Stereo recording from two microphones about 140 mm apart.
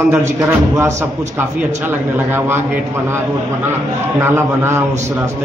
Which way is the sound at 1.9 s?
15° right (ahead or behind).